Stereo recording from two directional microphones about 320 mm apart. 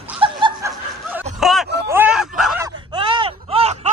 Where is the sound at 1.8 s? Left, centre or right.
Centre.